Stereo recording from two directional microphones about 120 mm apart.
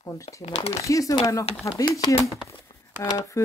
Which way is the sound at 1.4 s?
50° left (ahead or behind).